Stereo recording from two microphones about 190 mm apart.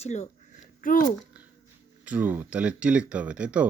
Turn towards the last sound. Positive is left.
turn(degrees=-5)  # may be behind; listen again after turning